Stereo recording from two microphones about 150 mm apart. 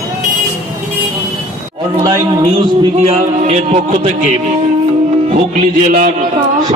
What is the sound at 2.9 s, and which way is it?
Speech, 40° right (ahead or behind).